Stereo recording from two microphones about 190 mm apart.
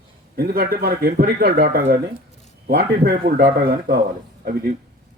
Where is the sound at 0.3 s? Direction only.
55° right (ahead or behind).